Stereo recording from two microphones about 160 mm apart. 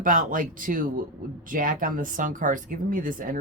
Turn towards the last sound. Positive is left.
turn(degrees=-60)  # may be behind; listen again after turning